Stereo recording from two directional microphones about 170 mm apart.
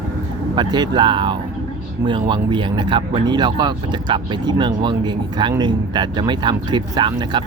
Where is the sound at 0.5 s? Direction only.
25° right (ahead or behind).